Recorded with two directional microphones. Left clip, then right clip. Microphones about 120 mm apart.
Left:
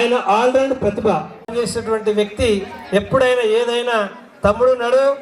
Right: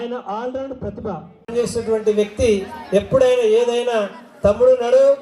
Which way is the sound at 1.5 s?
40° left (ahead or behind).